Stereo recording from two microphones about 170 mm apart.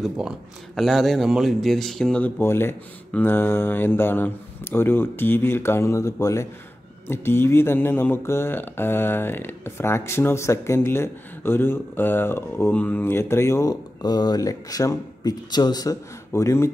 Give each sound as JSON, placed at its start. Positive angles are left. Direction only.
{"t": 0.0, "sound": "speech", "side_deg": 0}